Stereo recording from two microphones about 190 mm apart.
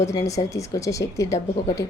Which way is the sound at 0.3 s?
15° left (ahead or behind).